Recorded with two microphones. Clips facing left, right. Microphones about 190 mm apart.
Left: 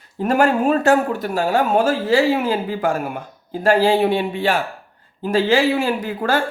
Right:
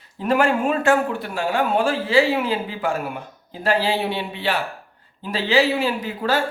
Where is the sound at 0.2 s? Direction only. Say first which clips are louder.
Left 2 dB; 45° left (ahead or behind).